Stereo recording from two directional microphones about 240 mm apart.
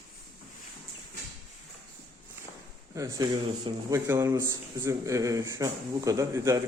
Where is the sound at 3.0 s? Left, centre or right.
Centre.